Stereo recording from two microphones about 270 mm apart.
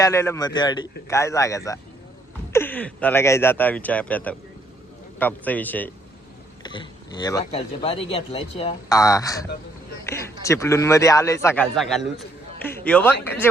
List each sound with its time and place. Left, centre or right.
0.0 s speech: centre
10.0 s a sound: centre
10.4 s speech: centre